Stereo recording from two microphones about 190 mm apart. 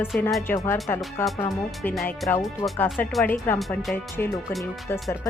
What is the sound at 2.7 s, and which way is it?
Speech, 10° left (ahead or behind).